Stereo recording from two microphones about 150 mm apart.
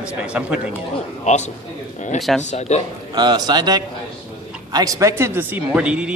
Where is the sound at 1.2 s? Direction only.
50° left (ahead or behind).